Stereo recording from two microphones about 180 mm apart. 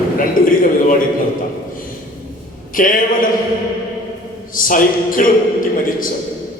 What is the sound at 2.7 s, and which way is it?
Speech, 50° left (ahead or behind).